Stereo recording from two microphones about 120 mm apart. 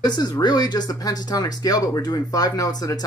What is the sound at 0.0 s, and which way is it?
Speech, 35° left (ahead or behind).